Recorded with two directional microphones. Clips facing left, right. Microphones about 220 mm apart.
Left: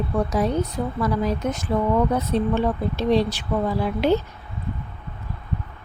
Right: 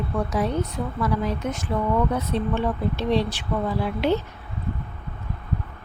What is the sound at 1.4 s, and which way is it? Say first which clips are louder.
Speech: left 3 dB; 40° left (ahead or behind).